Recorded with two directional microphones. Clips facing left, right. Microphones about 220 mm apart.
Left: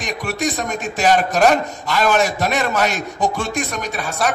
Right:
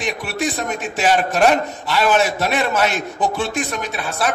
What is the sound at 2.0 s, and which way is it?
A man's voice, 40° left (ahead or behind).